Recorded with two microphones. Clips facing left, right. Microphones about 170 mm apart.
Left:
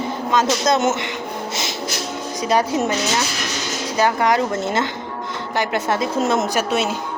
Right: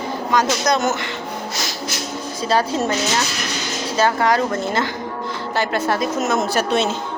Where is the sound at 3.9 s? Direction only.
15° left (ahead or behind).